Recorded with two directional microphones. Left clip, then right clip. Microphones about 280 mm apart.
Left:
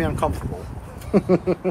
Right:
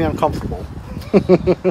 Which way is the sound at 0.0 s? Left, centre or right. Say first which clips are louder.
Right 5 dB; right.